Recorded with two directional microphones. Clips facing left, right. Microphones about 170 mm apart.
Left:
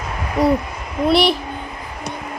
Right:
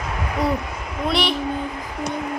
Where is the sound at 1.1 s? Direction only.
35° left (ahead or behind).